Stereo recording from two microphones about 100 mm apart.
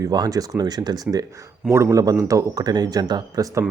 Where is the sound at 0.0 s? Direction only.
40° right (ahead or behind).